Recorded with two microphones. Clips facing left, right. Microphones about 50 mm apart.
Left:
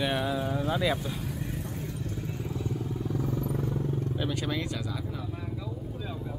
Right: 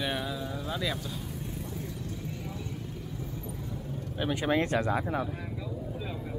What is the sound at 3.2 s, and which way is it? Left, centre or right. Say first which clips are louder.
Vehicle: left 8 dB; left.